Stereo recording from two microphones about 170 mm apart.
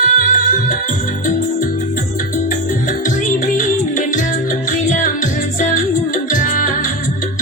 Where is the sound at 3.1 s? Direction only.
50° left (ahead or behind).